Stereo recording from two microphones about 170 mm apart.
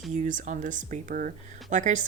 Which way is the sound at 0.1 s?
50° right (ahead or behind).